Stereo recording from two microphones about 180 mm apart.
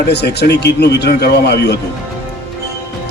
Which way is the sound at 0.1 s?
65° left (ahead or behind).